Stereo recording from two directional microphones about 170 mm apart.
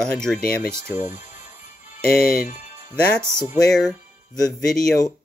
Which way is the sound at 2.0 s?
60° left (ahead or behind).